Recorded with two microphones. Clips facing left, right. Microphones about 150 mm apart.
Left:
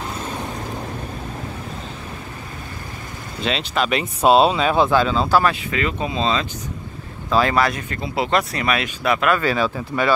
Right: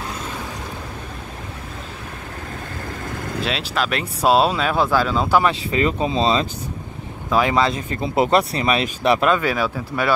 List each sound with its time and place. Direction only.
3.4 s speech: centre (ahead or behind)
5.7 s speech: 35° right (ahead or behind)
7.2 s speech: 15° right (ahead or behind)
9.4 s speech: 10° right (ahead or behind)